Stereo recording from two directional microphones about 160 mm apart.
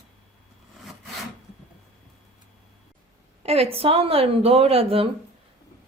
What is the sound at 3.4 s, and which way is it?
Speech, 40° right (ahead or behind).